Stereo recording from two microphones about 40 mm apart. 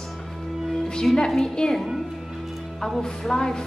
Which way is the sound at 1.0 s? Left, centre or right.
Centre.